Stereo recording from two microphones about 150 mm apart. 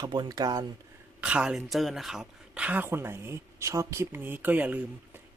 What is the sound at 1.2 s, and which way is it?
Speech, 5° right (ahead or behind).